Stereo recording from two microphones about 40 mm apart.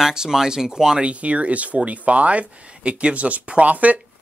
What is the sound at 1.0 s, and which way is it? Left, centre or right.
Speech, right.